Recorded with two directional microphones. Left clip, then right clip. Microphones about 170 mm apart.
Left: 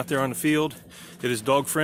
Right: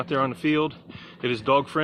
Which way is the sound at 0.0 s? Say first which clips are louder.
Right 1 dB; 25° left (ahead or behind).